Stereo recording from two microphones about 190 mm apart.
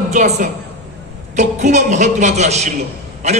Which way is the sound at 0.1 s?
40° right (ahead or behind).